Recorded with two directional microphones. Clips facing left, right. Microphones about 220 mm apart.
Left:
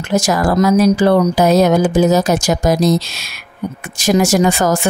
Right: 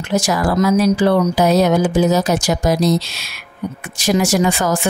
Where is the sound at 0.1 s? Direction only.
45° left (ahead or behind).